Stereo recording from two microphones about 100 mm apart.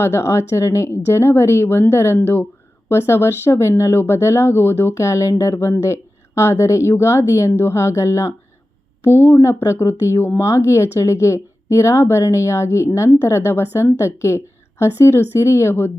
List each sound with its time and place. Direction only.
0.0 s a woman's voice: 25° left (ahead or behind)